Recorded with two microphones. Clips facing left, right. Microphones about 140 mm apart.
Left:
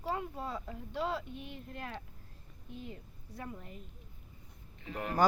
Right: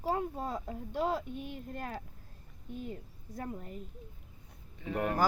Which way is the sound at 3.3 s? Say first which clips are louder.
Right 4 dB; 35° right (ahead or behind).